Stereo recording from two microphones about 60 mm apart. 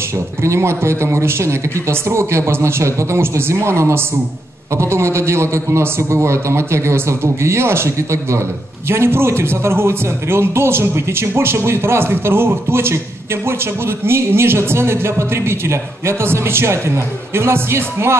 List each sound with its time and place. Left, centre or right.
0.4 s speech: right